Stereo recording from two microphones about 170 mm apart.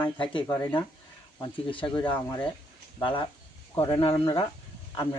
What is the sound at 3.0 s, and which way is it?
Speech, 30° left (ahead or behind).